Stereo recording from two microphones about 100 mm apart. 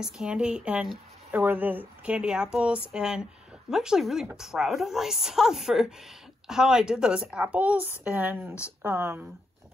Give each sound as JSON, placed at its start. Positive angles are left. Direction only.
{"t": 0.0, "sound": "a woman's voice", "side_deg": -10}